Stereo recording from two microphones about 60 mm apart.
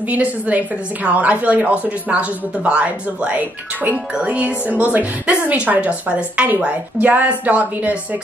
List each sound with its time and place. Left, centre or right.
0.0 s a woman's voice: right